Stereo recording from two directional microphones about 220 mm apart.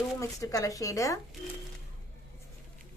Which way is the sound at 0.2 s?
15° left (ahead or behind).